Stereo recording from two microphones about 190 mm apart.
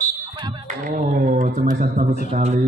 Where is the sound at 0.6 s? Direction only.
45° right (ahead or behind).